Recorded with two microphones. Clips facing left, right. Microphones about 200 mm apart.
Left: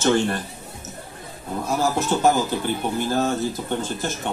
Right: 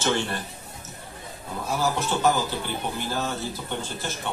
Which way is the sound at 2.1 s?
45° left (ahead or behind).